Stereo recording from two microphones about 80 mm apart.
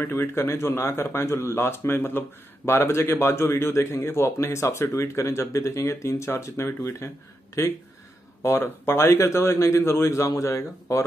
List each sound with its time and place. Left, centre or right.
0.0 s speech: left
8.4 s speech: left